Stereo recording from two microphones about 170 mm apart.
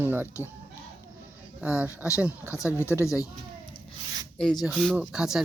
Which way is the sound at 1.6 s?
10° right (ahead or behind).